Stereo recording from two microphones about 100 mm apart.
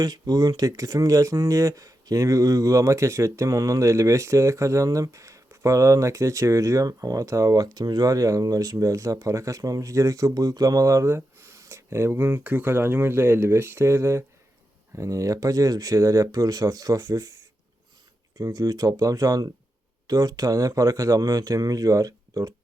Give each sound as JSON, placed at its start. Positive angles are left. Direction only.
{"t": 0.0, "sound": "speech", "side_deg": -40}